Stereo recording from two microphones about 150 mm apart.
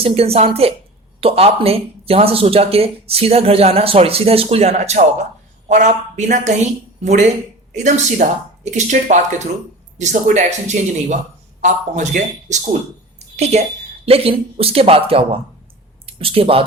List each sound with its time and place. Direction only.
0.0 s speech: 40° right (ahead or behind)
13.1 s a sound: 50° right (ahead or behind)
14.0 s speech: 40° right (ahead or behind)